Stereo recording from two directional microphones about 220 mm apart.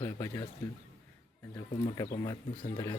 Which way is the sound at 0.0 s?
15° left (ahead or behind).